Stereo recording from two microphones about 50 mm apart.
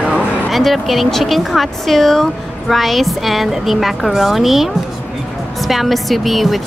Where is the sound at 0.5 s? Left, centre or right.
Centre.